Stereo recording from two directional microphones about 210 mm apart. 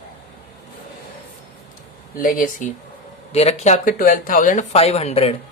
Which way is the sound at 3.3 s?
30° left (ahead or behind).